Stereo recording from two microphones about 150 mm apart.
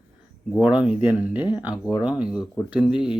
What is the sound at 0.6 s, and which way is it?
Speech, 10° right (ahead or behind).